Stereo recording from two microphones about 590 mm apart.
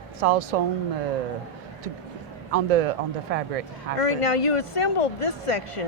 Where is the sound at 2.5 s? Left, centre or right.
Right.